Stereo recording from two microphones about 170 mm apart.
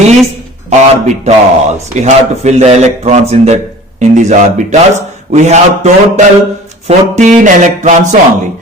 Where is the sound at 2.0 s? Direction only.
40° right (ahead or behind).